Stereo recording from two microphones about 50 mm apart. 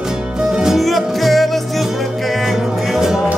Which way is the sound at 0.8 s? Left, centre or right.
Centre.